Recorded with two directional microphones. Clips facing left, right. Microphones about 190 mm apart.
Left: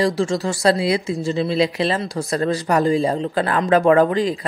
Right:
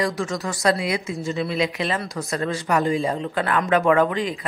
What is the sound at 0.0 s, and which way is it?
Speech, 30° left (ahead or behind).